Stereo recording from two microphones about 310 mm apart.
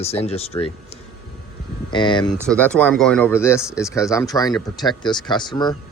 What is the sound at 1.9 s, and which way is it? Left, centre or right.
Speech, centre.